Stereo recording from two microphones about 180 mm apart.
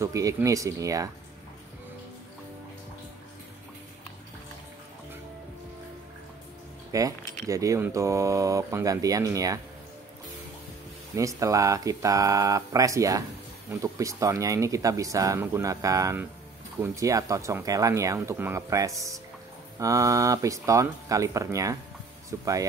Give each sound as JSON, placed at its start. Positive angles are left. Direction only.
{"t": 0.0, "sound": "speech", "side_deg": -20}
{"t": 6.9, "sound": "speech", "side_deg": -20}
{"t": 11.1, "sound": "speech", "side_deg": -20}